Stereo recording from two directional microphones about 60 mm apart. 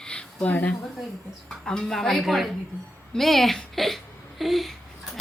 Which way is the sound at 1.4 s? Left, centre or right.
Centre.